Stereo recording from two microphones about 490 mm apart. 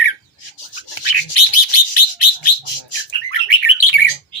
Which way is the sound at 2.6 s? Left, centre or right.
Left.